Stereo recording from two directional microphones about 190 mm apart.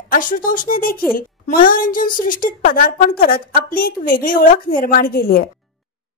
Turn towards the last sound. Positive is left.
turn(degrees=50)  # may be behind; listen again after turning